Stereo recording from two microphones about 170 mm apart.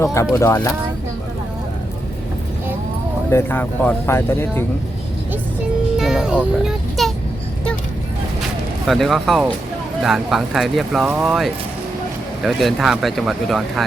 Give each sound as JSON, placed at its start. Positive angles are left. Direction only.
{"t": 0.0, "sound": "speech", "side_deg": 15}
{"t": 3.2, "sound": "speech", "side_deg": 15}
{"t": 6.0, "sound": "a child's voice", "side_deg": -5}
{"t": 8.9, "sound": "speech", "side_deg": 0}